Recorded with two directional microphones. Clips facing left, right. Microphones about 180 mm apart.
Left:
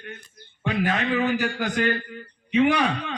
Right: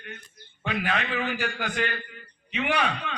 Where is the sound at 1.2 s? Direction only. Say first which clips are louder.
Left 6 dB; 40° left (ahead or behind).